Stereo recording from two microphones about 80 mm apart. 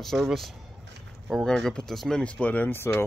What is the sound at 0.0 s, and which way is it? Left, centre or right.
Speech, centre.